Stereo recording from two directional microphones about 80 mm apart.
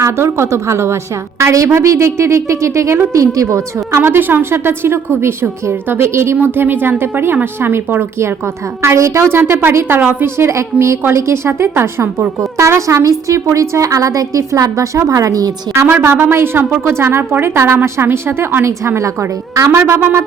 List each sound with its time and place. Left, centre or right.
0.0 s a woman's voice: right
15.7 s a woman's voice: right